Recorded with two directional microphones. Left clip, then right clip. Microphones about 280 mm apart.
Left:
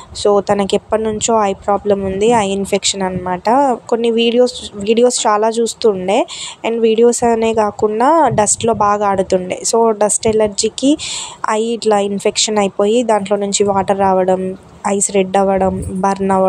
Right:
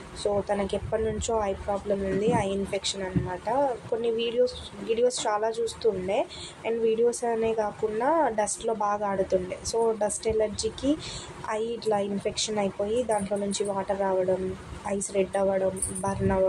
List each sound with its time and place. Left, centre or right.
0.2 s a woman's voice: left